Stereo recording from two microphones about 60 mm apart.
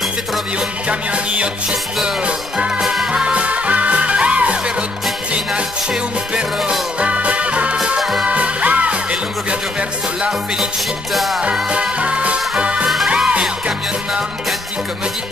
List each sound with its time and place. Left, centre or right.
0.8 s music: centre
2.8 s music: centre
3.1 s music: centre
6.3 s music: centre
8.0 s music: centre
8.3 s music: right
11.1 s music: centre
11.7 s music: centre